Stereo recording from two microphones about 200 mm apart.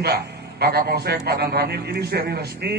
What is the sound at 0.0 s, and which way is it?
A man's voice, 55° right (ahead or behind).